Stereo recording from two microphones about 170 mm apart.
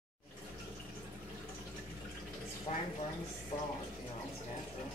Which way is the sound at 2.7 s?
40° left (ahead or behind).